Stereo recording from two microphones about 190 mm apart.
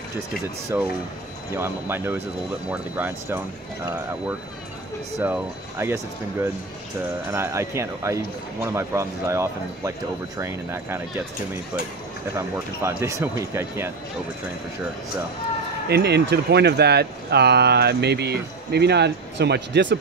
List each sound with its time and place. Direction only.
0.7 s speech: 10° right (ahead or behind)
5.2 s speech: 10° right (ahead or behind)
7.3 s speech: 15° right (ahead or behind)
12.5 s speech: 15° right (ahead or behind)
15.9 s speech: 60° right (ahead or behind)